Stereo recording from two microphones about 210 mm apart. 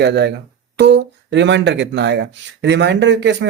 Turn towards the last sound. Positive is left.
turn(degrees=-55)  # may be behind; listen again after turning